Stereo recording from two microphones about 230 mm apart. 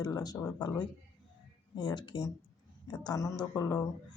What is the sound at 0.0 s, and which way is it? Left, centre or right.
Speech, centre.